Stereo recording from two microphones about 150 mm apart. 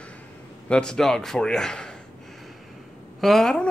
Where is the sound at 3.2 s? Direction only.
Centre (ahead or behind).